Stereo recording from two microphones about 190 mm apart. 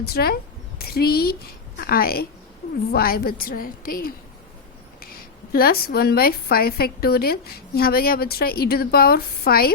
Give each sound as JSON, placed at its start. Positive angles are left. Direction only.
{"t": 0.0, "sound": "a woman's voice", "side_deg": 55}
{"t": 5.5, "sound": "a woman's voice", "side_deg": 50}